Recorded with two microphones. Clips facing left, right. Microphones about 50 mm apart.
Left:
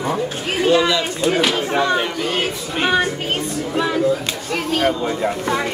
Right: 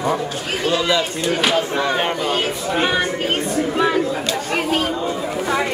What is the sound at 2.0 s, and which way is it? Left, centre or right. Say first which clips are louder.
Speech: right 1 dB; right.